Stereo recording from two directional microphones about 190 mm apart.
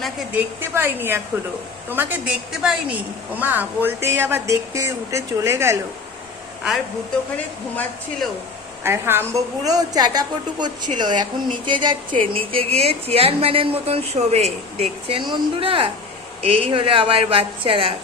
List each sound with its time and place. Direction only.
0.3 s speech: 10° right (ahead or behind)
7.3 s speech: 5° left (ahead or behind)
8.8 s a woman's voice: 10° right (ahead or behind); by 17.9 s 30° right (ahead or behind)